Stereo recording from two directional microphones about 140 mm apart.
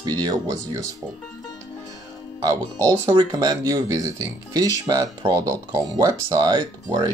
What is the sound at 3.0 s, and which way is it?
Speech, 30° right (ahead or behind).